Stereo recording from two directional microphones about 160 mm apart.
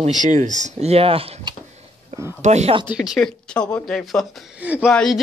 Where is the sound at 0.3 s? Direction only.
50° right (ahead or behind).